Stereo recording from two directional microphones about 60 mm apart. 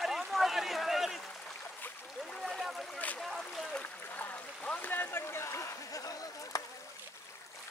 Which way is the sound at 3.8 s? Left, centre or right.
Left.